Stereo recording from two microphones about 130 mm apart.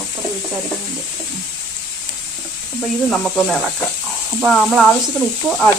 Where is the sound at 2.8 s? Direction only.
5° left (ahead or behind).